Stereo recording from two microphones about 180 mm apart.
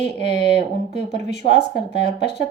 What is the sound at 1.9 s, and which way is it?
Speech, 65° left (ahead or behind).